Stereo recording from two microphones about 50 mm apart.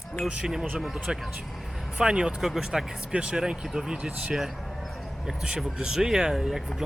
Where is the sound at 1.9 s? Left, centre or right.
Centre.